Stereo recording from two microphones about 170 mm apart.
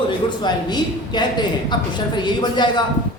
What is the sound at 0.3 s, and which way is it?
A man's voice, 25° left (ahead or behind).